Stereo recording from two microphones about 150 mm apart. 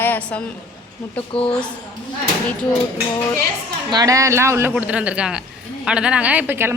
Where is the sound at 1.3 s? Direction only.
35° left (ahead or behind).